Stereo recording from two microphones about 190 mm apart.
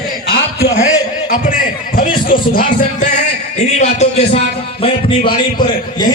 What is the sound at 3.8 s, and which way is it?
Speech, 35° left (ahead or behind).